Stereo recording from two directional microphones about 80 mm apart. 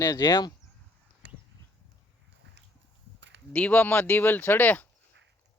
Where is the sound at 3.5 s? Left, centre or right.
Left.